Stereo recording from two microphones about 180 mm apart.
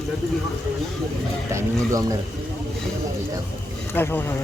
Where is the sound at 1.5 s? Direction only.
20° right (ahead or behind).